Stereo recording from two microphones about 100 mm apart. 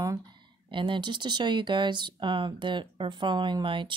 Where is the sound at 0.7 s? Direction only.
55° right (ahead or behind).